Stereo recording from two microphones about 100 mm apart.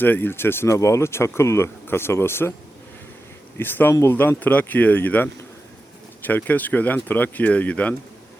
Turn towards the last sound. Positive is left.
turn(degrees=15)  # may be behind; listen again after turning